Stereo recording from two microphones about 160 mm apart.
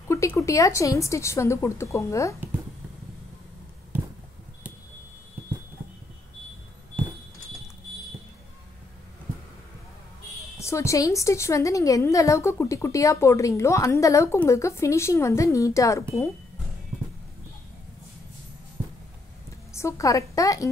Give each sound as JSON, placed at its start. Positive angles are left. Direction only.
{"t": 0.1, "sound": "a woman's voice", "side_deg": 20}
{"t": 10.6, "sound": "a woman's voice", "side_deg": 20}
{"t": 19.7, "sound": "a woman's voice", "side_deg": 20}